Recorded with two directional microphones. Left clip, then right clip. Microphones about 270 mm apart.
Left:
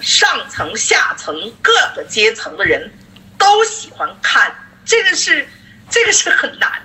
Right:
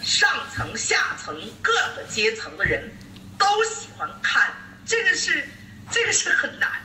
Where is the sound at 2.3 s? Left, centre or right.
Left.